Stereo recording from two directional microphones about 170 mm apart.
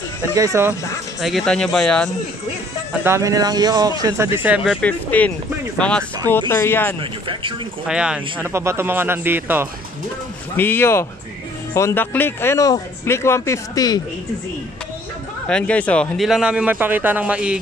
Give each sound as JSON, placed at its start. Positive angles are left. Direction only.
{"t": 0.3, "sound": "speech", "side_deg": -20}
{"t": 1.2, "sound": "speech", "side_deg": 0}
{"t": 2.9, "sound": "speech", "side_deg": -15}
{"t": 4.8, "sound": "speech", "side_deg": 10}
{"t": 7.0, "sound": "speech", "side_deg": -30}
{"t": 7.8, "sound": "speech", "side_deg": -5}
{"t": 10.5, "sound": "speech", "side_deg": 10}
{"t": 15.4, "sound": "speech", "side_deg": 5}